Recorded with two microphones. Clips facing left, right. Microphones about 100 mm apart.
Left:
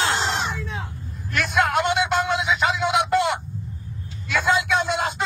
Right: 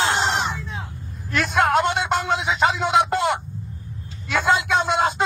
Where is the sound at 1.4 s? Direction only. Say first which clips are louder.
Right 2 dB; 35° right (ahead or behind).